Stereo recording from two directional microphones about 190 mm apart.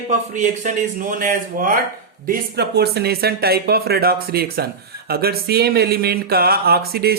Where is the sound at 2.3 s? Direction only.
60° right (ahead or behind).